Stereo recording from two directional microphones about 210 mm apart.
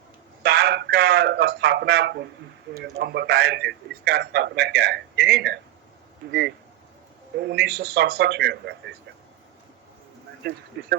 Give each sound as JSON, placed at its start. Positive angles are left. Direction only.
{"t": 0.4, "sound": "a sound", "side_deg": -50}
{"t": 3.0, "sound": "a man's voice", "side_deg": -50}
{"t": 7.4, "sound": "a man's voice", "side_deg": -50}